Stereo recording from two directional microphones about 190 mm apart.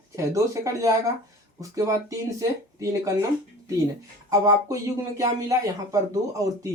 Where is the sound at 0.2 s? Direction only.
15° right (ahead or behind).